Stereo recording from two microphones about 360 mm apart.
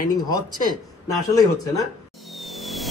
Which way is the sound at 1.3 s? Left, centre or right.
Centre.